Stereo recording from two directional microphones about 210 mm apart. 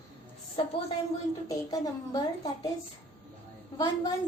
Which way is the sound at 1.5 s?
15° left (ahead or behind).